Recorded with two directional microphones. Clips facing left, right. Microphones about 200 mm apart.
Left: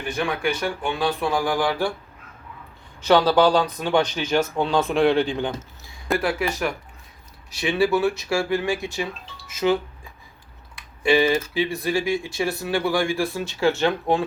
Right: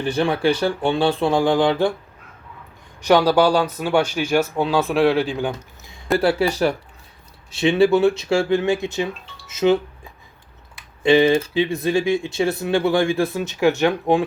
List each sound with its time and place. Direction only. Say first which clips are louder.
0.0 s speech: right 6 dB; 30° right (ahead or behind)
3.0 s speech: right 2 dB; 15° right (ahead or behind)
6.1 s speech: right 6 dB; 35° right (ahead or behind)
10.8 s speech: right 4 dB; 20° right (ahead or behind)